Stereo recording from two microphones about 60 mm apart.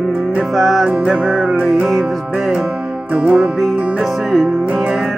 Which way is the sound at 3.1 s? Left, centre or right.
Right.